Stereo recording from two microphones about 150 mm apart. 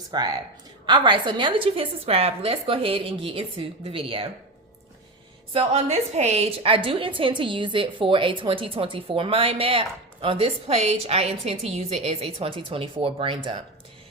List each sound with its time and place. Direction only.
0.1 s a woman's voice: 25° right (ahead or behind)
5.5 s a woman's voice: 45° right (ahead or behind)